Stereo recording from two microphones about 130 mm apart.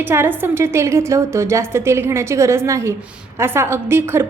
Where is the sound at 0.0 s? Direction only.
15° right (ahead or behind).